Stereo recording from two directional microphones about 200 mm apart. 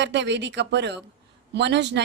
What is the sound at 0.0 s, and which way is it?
Speech, 60° right (ahead or behind).